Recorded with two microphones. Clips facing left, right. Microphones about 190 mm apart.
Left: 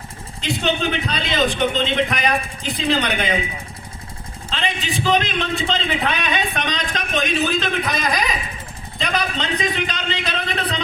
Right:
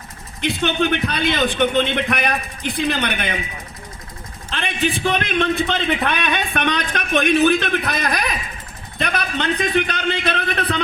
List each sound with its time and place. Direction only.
0.4 s a man's voice: 60° right (ahead or behind)
4.5 s a man's voice: 55° right (ahead or behind)